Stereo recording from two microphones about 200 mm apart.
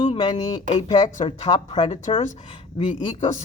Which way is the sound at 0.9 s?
20° left (ahead or behind).